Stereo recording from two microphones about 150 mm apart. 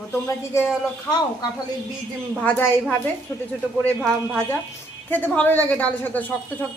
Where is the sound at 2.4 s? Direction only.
10° left (ahead or behind).